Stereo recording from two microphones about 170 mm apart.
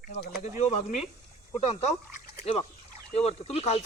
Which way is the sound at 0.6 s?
45° left (ahead or behind).